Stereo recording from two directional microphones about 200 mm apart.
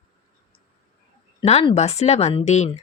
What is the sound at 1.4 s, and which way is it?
A woman's voice, 30° left (ahead or behind).